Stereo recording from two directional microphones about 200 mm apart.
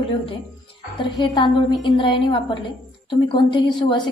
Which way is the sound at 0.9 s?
20° left (ahead or behind).